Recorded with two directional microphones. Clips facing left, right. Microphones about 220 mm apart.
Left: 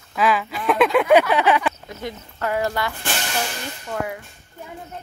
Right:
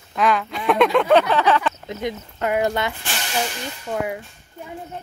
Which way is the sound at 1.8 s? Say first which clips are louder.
Right 5 dB; 20° right (ahead or behind).